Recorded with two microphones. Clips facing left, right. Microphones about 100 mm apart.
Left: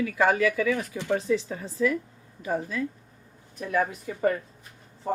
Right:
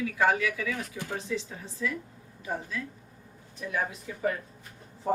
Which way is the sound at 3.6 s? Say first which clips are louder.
Left 6 dB; 55° left (ahead or behind).